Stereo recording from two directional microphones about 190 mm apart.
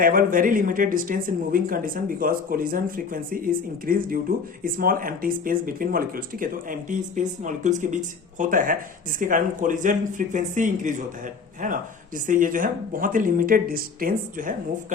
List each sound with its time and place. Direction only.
0.0 s speech: 45° right (ahead or behind)